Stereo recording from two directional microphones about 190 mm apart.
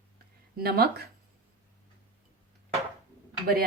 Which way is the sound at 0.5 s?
55° right (ahead or behind).